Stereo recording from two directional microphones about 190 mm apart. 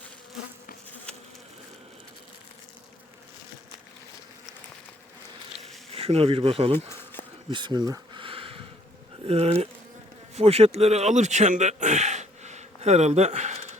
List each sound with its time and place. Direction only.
5.9 s speech: 30° right (ahead or behind)
7.5 s a sound: 25° right (ahead or behind)
9.2 s speech: 35° right (ahead or behind)